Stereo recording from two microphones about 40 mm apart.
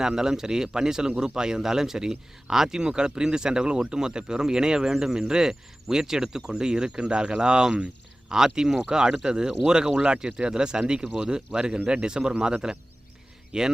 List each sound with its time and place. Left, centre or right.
0.2 s speech: centre